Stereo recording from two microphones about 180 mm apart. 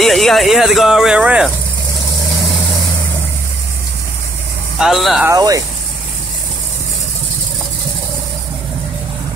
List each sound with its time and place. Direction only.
0.0 s speech: centre (ahead or behind)
4.7 s speech: centre (ahead or behind)
5.2 s speech: 20° right (ahead or behind)